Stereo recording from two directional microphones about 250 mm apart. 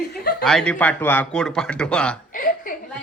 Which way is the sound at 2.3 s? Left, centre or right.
Left.